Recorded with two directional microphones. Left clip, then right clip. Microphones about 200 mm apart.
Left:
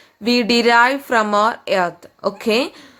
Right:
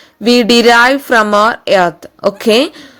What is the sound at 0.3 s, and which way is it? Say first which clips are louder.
A woman's voice: right 7 dB; 30° right (ahead or behind).